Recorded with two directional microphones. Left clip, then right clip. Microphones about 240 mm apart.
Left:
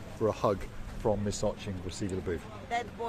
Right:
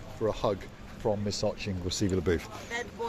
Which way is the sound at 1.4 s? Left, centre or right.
Centre.